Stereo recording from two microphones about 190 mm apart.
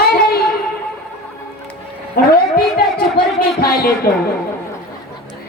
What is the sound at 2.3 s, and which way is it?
Speech, 50° left (ahead or behind).